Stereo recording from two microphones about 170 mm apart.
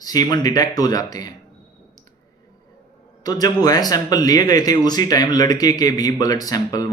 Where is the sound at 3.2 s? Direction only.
20° left (ahead or behind).